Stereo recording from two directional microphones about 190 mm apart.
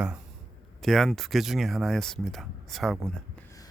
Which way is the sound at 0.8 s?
Centre (ahead or behind).